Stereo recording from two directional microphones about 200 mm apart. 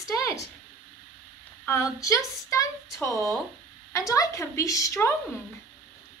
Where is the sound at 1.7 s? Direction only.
15° left (ahead or behind).